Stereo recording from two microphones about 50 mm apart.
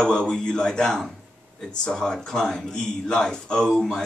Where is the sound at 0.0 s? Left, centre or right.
Centre.